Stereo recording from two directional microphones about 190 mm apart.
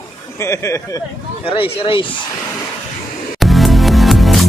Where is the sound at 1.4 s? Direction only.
30° left (ahead or behind).